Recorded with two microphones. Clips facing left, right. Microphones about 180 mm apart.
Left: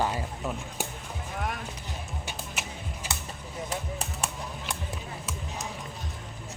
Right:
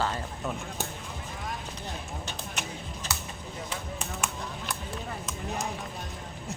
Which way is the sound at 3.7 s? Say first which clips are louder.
Left 2 dB; 40° left (ahead or behind).